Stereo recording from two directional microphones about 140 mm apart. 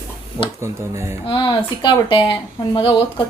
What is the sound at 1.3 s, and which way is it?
Speech, 35° left (ahead or behind).